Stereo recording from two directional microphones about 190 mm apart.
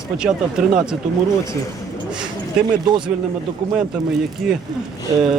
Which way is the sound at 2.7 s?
25° right (ahead or behind).